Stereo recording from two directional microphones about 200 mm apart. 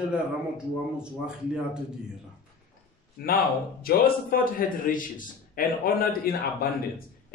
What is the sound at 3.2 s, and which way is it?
A man's voice, 50° left (ahead or behind).